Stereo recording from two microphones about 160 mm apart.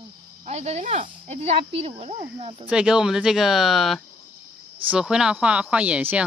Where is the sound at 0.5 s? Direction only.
45° right (ahead or behind).